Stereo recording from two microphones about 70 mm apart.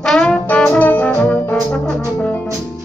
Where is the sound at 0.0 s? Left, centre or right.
Centre.